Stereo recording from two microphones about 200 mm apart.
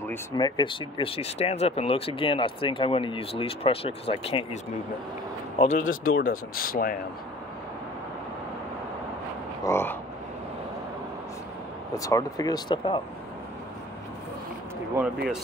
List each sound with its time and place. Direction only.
0.0 s speech: 10° left (ahead or behind)
0.6 s speech: 25° left (ahead or behind)
5.6 s speech: 40° left (ahead or behind)
9.7 s a sound: 10° left (ahead or behind)
11.9 s speech: 15° left (ahead or behind)